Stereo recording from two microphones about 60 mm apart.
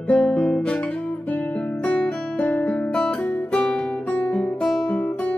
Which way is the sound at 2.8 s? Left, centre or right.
Centre.